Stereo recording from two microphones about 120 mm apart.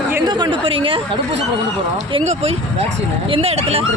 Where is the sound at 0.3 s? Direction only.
40° right (ahead or behind).